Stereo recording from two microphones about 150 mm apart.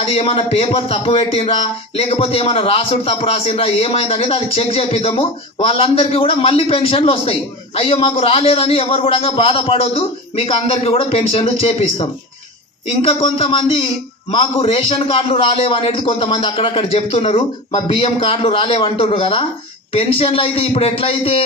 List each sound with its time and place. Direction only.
0.0 s speech: 40° left (ahead or behind)